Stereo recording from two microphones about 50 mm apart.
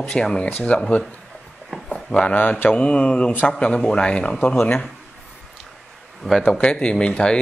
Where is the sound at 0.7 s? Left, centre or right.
Left.